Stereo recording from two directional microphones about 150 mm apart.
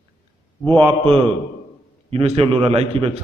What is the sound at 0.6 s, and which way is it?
Speech, 10° left (ahead or behind).